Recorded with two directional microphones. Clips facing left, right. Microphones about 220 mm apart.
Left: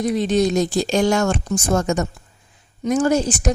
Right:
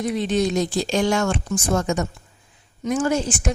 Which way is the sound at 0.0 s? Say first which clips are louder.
Left 3 dB; 40° left (ahead or behind).